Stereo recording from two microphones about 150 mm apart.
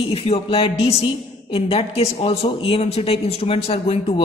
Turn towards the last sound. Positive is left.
turn(degrees=45)  # may be behind; listen again after turning